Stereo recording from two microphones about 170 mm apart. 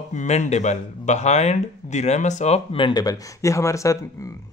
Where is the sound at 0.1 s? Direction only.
45° left (ahead or behind).